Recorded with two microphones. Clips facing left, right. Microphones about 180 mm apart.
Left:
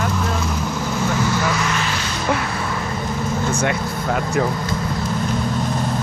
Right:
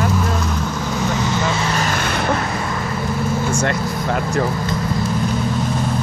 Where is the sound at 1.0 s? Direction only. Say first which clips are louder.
Even; 20° right (ahead or behind); by 2.2 s 55° right (ahead or behind).